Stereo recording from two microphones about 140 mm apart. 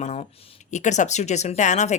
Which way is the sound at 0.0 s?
55° left (ahead or behind).